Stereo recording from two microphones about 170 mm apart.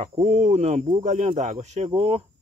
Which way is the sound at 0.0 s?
40° right (ahead or behind).